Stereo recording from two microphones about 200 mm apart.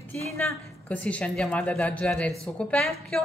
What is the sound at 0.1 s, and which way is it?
A woman's voice, 10° left (ahead or behind).